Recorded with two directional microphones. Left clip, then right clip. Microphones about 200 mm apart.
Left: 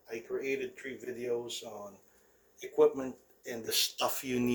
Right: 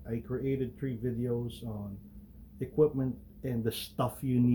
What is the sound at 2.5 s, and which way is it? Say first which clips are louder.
Speech: left 1 dB; 15° left (ahead or behind).